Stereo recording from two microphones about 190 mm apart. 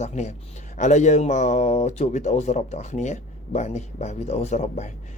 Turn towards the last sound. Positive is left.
turn(degrees=35)  # may be behind; listen again after turning